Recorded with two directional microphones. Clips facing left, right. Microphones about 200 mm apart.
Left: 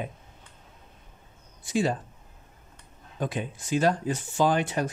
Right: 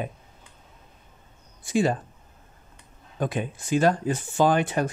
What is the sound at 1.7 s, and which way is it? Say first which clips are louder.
Speech: right 3 dB; 55° right (ahead or behind).